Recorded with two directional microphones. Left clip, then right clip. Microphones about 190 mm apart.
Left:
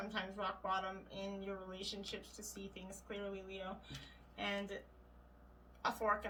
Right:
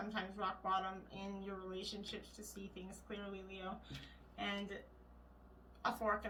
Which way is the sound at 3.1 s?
45° left (ahead or behind).